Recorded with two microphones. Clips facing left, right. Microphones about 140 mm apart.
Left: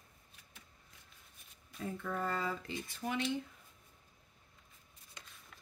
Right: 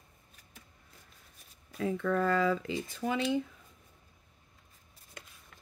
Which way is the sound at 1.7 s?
90° right.